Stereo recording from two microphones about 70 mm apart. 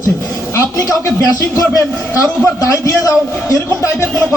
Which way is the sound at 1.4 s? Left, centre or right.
Left.